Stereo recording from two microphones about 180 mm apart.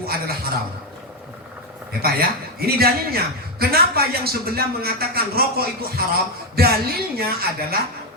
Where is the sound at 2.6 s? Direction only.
60° right (ahead or behind).